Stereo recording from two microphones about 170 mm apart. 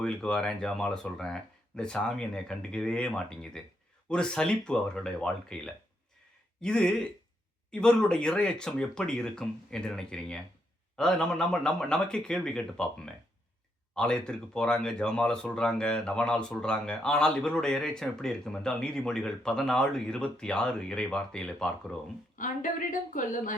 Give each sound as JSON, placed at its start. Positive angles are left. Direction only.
{"t": 0.0, "sound": "speech", "side_deg": 5}
{"t": 13.9, "sound": "speech", "side_deg": 5}
{"t": 22.4, "sound": "a woman's voice", "side_deg": 50}